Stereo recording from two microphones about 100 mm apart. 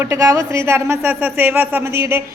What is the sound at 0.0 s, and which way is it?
Speech, 30° right (ahead or behind).